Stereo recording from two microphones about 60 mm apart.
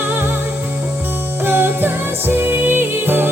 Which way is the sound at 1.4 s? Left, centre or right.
Right.